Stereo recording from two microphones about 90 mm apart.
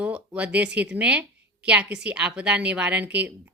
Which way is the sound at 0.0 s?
15° right (ahead or behind).